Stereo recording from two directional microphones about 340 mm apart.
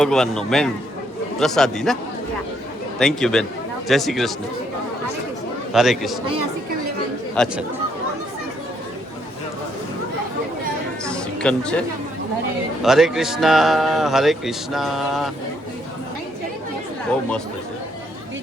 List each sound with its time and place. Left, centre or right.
0.0 s speech: centre
3.0 s speech: centre
5.7 s speech: centre
7.4 s speech: centre
11.0 s a sound: centre
12.8 s speech: centre